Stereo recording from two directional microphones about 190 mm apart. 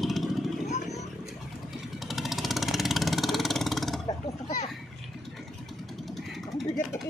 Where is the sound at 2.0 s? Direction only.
Centre (ahead or behind).